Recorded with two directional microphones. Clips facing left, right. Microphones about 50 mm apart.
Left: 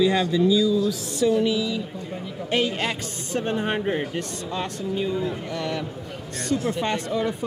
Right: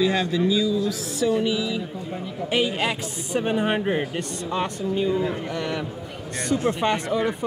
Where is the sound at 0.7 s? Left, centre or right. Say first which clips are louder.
Left 2 dB; centre.